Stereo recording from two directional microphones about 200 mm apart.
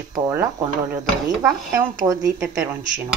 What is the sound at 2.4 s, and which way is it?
Speech, centre (ahead or behind).